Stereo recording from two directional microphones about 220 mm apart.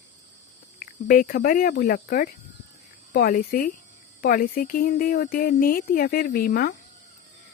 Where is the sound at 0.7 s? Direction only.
40° left (ahead or behind).